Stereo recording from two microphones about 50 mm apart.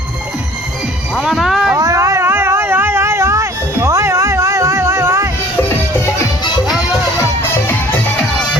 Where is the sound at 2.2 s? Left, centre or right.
Right.